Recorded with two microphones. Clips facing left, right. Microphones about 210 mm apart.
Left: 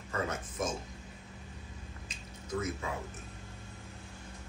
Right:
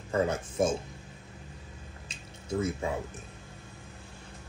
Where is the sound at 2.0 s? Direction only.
30° right (ahead or behind).